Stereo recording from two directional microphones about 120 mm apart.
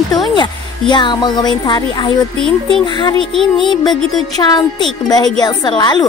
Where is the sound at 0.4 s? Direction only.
40° left (ahead or behind).